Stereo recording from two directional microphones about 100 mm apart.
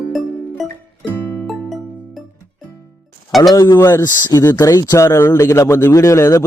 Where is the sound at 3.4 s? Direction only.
40° left (ahead or behind).